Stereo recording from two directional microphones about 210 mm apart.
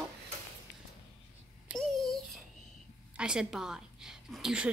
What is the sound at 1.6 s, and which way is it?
A woman's voice, centre (ahead or behind).